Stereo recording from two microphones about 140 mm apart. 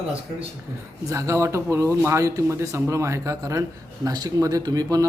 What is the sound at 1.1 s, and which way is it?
A man's voice, 20° right (ahead or behind).